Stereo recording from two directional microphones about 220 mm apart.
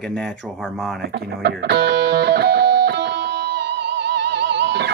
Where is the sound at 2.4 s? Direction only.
45° right (ahead or behind).